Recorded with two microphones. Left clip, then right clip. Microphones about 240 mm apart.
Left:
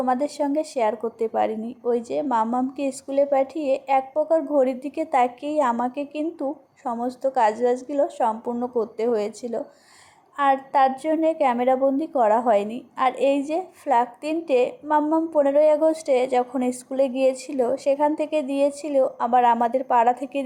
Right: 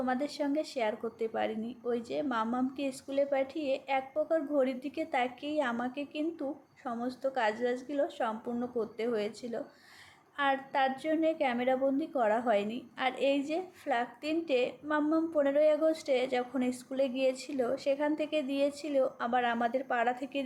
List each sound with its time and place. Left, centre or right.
0.0 s a woman's voice: centre